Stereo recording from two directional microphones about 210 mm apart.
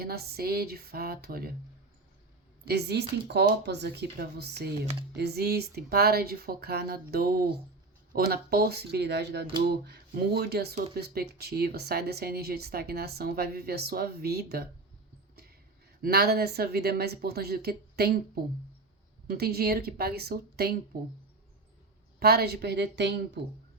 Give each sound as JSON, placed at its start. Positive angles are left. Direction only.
{"t": 0.0, "sound": "speech", "side_deg": -50}
{"t": 2.6, "sound": "speech", "side_deg": -50}
{"t": 16.0, "sound": "speech", "side_deg": -45}
{"t": 19.3, "sound": "speech", "side_deg": -50}
{"t": 22.2, "sound": "speech", "side_deg": -50}